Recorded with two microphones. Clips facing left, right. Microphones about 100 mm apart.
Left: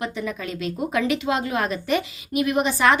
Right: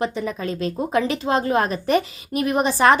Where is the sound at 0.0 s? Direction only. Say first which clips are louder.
Right 4 dB; 30° right (ahead or behind).